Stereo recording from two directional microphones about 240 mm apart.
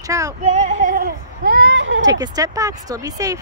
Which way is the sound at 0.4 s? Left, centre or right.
Right.